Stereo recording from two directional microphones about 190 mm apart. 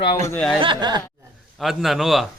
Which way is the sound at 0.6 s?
25° right (ahead or behind).